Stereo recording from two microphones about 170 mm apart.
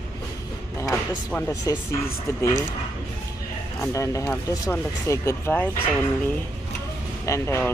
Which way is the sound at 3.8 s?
15° left (ahead or behind).